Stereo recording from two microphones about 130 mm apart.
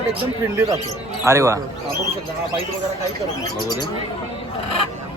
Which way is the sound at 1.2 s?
20° right (ahead or behind).